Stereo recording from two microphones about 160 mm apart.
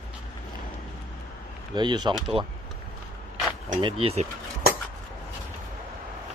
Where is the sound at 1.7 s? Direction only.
25° right (ahead or behind).